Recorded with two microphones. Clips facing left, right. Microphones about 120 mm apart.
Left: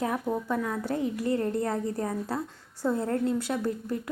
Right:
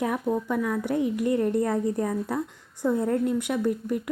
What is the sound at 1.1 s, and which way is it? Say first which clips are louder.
A woman's voice: right 4 dB; 20° right (ahead or behind).